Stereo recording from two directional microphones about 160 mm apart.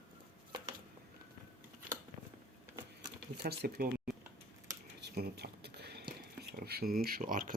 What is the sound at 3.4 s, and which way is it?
Speech, 75° right (ahead or behind).